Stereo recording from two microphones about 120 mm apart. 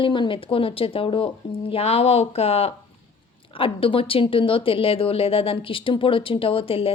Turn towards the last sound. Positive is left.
turn(degrees=50)  # may be behind; listen again after turning